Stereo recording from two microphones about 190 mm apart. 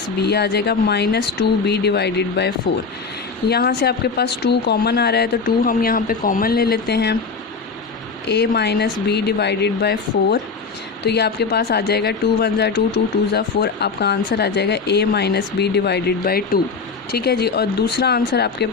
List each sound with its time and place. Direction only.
0.2 s speech: 60° left (ahead or behind)
3.5 s speech: 60° left (ahead or behind)
8.3 s speech: 60° left (ahead or behind)